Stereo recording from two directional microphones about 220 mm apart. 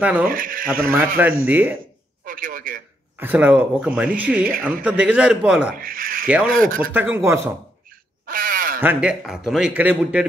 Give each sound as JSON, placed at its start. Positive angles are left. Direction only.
{"t": 0.0, "sound": "speech", "side_deg": -5}
{"t": 0.3, "sound": "speech", "side_deg": -40}
{"t": 0.9, "sound": "speech", "side_deg": -10}
{"t": 2.2, "sound": "a man's voice", "side_deg": -40}
{"t": 3.2, "sound": "speech", "side_deg": -10}
{"t": 5.8, "sound": "speech", "side_deg": -40}
{"t": 6.9, "sound": "speech", "side_deg": -10}
{"t": 8.3, "sound": "a sound", "side_deg": -40}
{"t": 8.8, "sound": "speech", "side_deg": -5}